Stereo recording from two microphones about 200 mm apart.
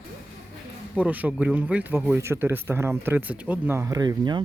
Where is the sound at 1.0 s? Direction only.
10° right (ahead or behind).